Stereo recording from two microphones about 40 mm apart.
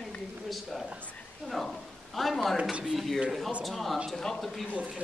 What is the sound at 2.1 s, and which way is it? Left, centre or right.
Speech, centre.